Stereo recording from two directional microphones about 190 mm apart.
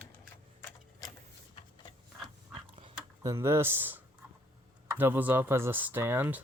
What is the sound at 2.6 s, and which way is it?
Dog, 30° right (ahead or behind).